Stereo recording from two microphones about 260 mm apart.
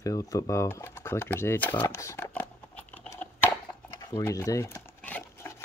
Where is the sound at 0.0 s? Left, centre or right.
Centre.